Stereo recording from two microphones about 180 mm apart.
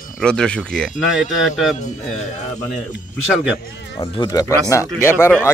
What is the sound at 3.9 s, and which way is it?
Speech, 25° left (ahead or behind).